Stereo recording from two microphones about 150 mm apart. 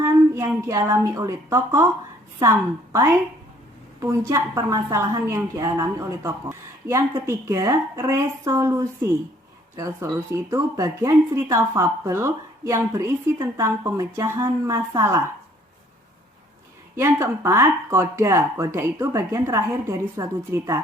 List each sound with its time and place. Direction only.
0.0 s a woman's voice: 20° right (ahead or behind)
16.9 s speech: 20° right (ahead or behind)